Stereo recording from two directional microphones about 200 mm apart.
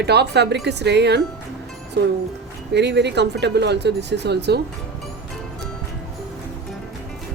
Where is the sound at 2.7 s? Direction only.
60° right (ahead or behind).